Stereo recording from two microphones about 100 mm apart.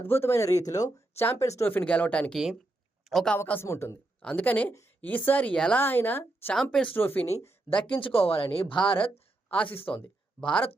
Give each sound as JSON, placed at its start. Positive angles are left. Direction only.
{"t": 0.0, "sound": "a woman's voice", "side_deg": 25}
{"t": 1.7, "sound": "speech", "side_deg": 15}
{"t": 2.3, "sound": "speech", "side_deg": -5}
{"t": 3.3, "sound": "a woman's voice", "side_deg": 20}
{"t": 4.2, "sound": "a woman's voice", "side_deg": 15}
{"t": 6.5, "sound": "speech", "side_deg": 5}
{"t": 6.9, "sound": "a woman's voice", "side_deg": 20}
{"t": 7.3, "sound": "speech", "side_deg": 90}
{"t": 8.0, "sound": "a woman's voice", "side_deg": 70}
{"t": 9.7, "sound": "speech", "side_deg": 20}